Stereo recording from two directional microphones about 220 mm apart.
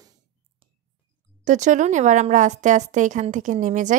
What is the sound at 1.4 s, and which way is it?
A woman's voice, 35° right (ahead or behind).